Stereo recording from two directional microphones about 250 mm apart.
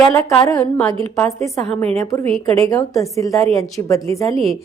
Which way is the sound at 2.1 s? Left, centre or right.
Centre.